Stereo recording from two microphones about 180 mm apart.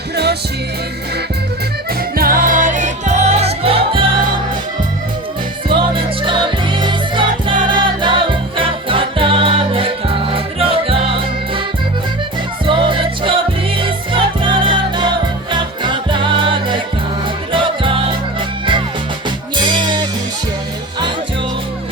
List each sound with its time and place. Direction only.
2.1 s music: 55° right (ahead or behind); by 4.0 s 30° right (ahead or behind)
6.2 s music: 25° right (ahead or behind)
12.6 s music: 30° right (ahead or behind)